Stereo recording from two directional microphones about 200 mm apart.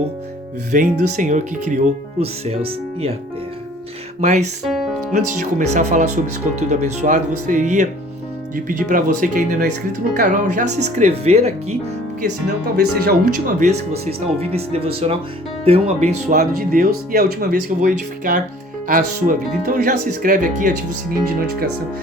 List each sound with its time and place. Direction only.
0.7 s speech: 40° right (ahead or behind)
4.2 s speech: 35° right (ahead or behind)
4.6 s music: centre (ahead or behind)
5.1 s speech: 35° right (ahead or behind)
12.2 s speech: 50° right (ahead or behind)
13.6 s speech: 30° right (ahead or behind)
16.3 s speech: 50° right (ahead or behind)